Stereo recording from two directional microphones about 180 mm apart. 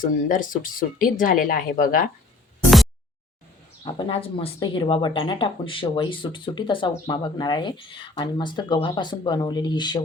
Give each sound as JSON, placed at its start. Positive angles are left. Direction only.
{"t": 0.0, "sound": "speech", "side_deg": 45}
{"t": 3.8, "sound": "speech", "side_deg": 25}